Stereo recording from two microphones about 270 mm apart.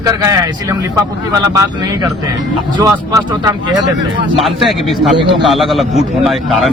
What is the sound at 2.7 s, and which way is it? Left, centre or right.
Speech, centre.